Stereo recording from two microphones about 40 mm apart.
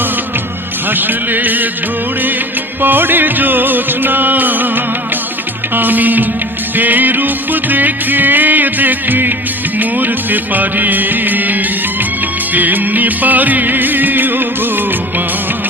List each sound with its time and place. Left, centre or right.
0.9 s music: right
2.8 s music: right